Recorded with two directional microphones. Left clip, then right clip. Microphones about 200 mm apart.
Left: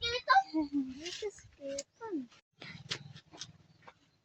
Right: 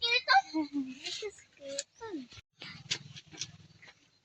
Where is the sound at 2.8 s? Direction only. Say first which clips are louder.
Right 5 dB; 20° left (ahead or behind).